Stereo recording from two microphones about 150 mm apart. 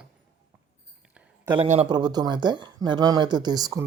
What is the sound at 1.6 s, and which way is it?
Speech, 50° right (ahead or behind).